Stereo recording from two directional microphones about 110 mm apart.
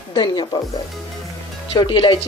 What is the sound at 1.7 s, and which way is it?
Speech, 45° left (ahead or behind).